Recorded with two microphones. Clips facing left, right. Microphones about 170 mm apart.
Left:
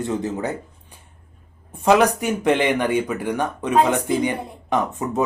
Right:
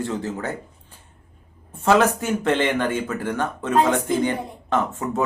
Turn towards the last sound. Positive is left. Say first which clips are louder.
# left 1 dB
turn(degrees=15)  # may be behind; listen again after turning